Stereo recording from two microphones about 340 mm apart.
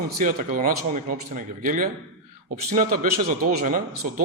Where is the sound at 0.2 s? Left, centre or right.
Right.